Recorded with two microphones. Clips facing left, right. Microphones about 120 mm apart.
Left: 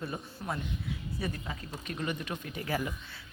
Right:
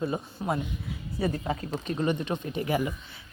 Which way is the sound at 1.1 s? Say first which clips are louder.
Right 12 dB; 40° right (ahead or behind).